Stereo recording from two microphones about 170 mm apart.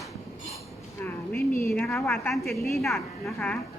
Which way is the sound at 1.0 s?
10° left (ahead or behind).